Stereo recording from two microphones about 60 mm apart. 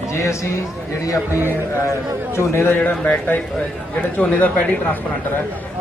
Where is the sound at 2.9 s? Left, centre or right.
Left.